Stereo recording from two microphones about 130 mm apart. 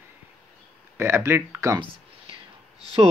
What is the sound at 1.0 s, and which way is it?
Speech, 20° right (ahead or behind).